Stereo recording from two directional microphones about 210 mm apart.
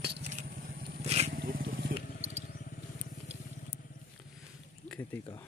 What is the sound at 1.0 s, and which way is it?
Wild animals, 30° right (ahead or behind).